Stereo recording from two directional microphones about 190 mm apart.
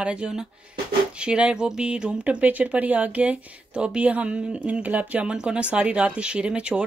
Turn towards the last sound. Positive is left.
turn(degrees=-5)  # may be behind; listen again after turning